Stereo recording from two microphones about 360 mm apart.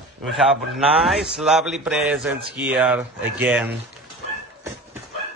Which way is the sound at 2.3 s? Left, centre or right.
Right.